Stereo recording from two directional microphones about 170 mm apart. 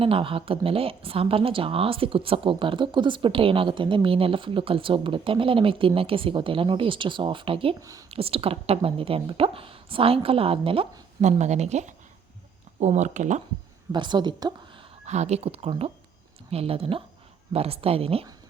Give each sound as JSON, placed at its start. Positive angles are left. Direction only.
{"t": 0.0, "sound": "speech", "side_deg": -30}
{"t": 7.8, "sound": "speech", "side_deg": -20}
{"t": 8.1, "sound": "speech", "side_deg": -35}
{"t": 11.2, "sound": "speech", "side_deg": -40}
{"t": 13.9, "sound": "a woman's voice", "side_deg": -25}
{"t": 15.0, "sound": "speech", "side_deg": -40}